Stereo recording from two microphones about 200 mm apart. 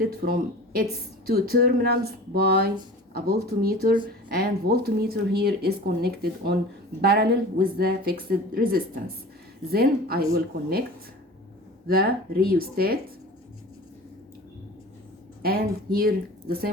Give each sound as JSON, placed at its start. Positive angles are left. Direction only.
{"t": 0.0, "sound": "speech", "side_deg": -50}
{"t": 11.9, "sound": "speech", "side_deg": -50}
{"t": 15.4, "sound": "speech", "side_deg": -50}